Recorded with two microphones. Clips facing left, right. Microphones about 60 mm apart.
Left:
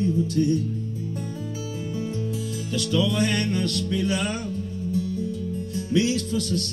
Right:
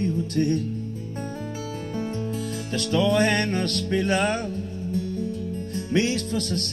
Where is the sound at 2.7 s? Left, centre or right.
Right.